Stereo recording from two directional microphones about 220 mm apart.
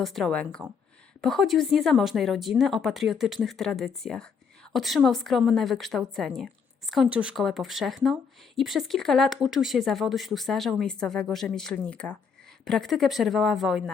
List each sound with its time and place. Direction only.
0.0 s speech: centre (ahead or behind)